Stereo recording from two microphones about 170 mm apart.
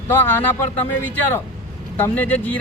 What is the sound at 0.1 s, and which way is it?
Speech, 10° left (ahead or behind).